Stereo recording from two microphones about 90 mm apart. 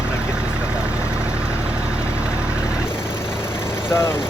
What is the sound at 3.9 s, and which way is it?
Speech, 30° left (ahead or behind).